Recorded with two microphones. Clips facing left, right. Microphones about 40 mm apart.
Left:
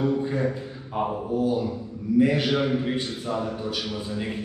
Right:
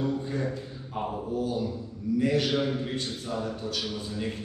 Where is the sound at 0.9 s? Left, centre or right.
Left.